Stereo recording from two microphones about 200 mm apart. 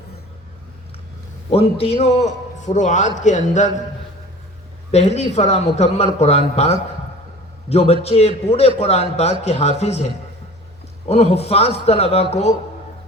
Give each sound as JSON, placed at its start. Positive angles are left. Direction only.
{"t": 1.5, "sound": "a man's voice", "side_deg": 30}
{"t": 4.9, "sound": "a man's voice", "side_deg": 35}
{"t": 11.1, "sound": "a man's voice", "side_deg": 30}